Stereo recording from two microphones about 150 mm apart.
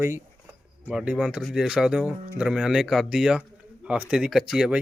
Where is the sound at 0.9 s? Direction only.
10° right (ahead or behind).